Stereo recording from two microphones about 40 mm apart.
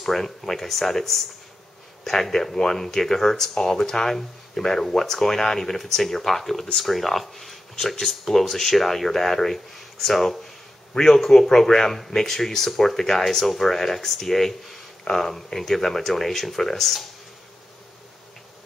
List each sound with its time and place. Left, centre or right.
0.0 s speech: centre